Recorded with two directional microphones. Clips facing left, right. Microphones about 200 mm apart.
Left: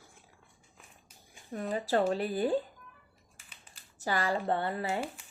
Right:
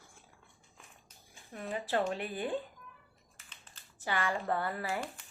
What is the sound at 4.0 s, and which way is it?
Speech, 40° left (ahead or behind).